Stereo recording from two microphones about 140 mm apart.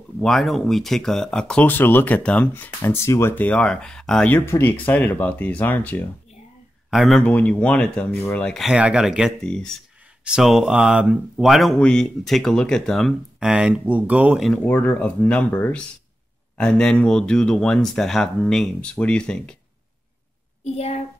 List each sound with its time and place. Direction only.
0.2 s speech: 5° left (ahead or behind)
6.9 s speech: centre (ahead or behind)
9.4 s speech: 5° left (ahead or behind)
13.5 s speech: 10° right (ahead or behind)
14.4 s speech: 10° left (ahead or behind)
20.6 s a child's voice: 50° left (ahead or behind)